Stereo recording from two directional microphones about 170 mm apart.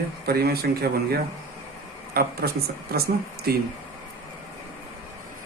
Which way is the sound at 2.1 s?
60° right (ahead or behind).